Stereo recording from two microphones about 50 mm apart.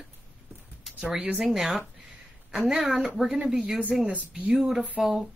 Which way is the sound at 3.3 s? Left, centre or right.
Centre.